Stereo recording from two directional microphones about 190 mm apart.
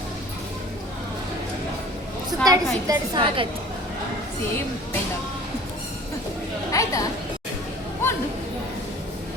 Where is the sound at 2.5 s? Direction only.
25° right (ahead or behind).